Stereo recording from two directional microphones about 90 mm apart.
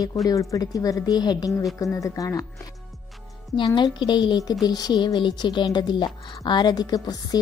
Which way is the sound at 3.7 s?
60° left (ahead or behind).